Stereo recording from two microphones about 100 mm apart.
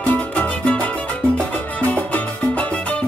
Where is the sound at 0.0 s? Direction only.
15° left (ahead or behind).